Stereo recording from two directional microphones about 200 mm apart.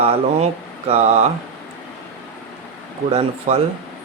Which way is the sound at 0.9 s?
35° right (ahead or behind).